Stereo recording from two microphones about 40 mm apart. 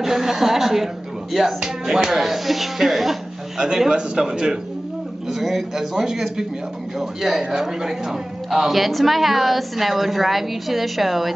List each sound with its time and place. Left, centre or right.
0.0 s a man's voice: centre
3.5 s a man's voice: centre